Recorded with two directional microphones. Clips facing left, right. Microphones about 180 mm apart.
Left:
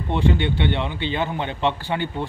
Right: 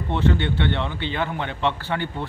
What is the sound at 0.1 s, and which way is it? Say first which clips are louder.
A man's voice: left 1 dB; 15° left (ahead or behind).